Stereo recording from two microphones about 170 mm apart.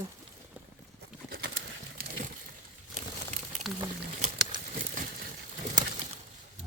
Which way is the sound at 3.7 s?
Centre (ahead or behind).